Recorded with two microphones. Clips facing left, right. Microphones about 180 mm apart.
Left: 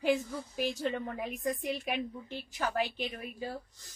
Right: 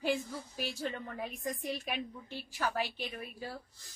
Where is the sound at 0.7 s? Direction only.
15° left (ahead or behind).